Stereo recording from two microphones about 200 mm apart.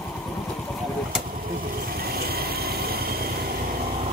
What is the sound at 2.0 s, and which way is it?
Vehicle, 50° right (ahead or behind).